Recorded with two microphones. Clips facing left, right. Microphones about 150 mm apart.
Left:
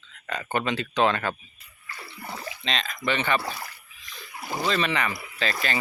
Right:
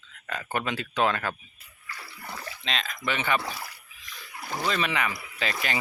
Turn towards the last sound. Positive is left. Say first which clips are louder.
# left 2 dB
turn(degrees=-15)  # may be behind; listen again after turning